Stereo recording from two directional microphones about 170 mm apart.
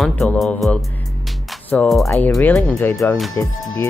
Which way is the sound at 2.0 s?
15° left (ahead or behind).